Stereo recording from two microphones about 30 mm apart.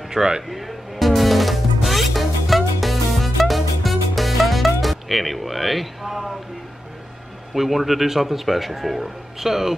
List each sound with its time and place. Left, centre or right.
0.1 s speech: right
0.5 s music: centre
7.5 s speech: centre